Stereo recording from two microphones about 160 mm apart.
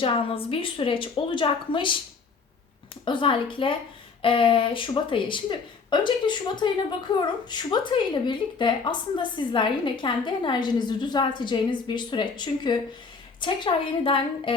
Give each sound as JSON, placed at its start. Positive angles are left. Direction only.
{"t": 0.0, "sound": "speech", "side_deg": 35}
{"t": 3.0, "sound": "a woman's voice", "side_deg": 30}